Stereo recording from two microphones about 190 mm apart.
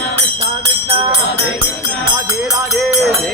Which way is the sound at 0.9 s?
30° right (ahead or behind).